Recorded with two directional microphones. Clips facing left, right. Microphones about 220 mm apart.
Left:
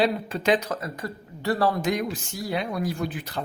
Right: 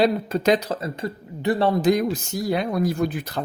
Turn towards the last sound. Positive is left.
turn(degrees=-45)  # may be behind; listen again after turning